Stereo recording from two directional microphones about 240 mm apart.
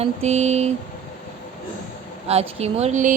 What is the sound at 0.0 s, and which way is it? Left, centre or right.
Speech, right.